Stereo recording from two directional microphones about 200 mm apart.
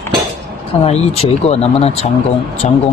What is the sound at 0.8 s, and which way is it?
Speech, 30° left (ahead or behind).